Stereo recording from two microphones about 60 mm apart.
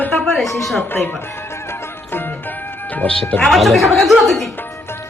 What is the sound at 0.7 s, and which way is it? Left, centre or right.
Speech, left.